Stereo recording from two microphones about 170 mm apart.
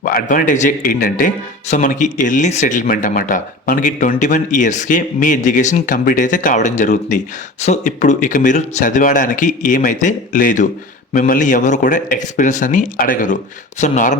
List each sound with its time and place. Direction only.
0.0 s speech: 55° left (ahead or behind)